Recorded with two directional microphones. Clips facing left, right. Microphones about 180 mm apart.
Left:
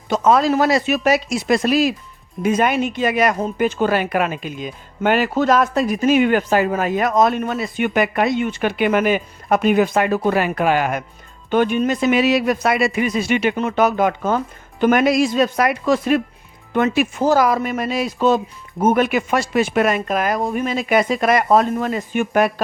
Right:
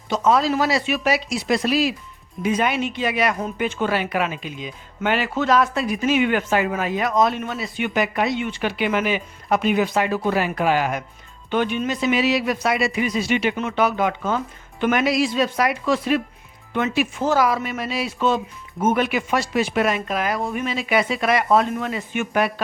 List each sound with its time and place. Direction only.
0.1 s speech: 50° left (ahead or behind)